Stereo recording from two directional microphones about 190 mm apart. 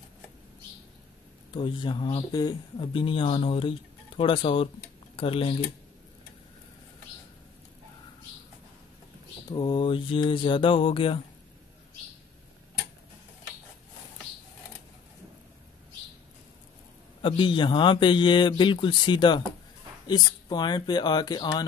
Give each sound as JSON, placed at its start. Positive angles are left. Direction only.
{"t": 1.5, "sound": "speech", "side_deg": 25}
{"t": 9.5, "sound": "speech", "side_deg": 25}
{"t": 17.2, "sound": "speech", "side_deg": 25}